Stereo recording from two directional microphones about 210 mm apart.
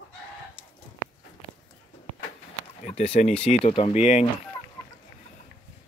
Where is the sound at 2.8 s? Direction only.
30° left (ahead or behind).